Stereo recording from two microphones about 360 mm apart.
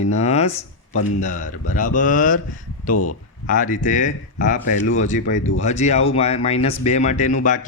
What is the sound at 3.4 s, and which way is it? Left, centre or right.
Speech, left.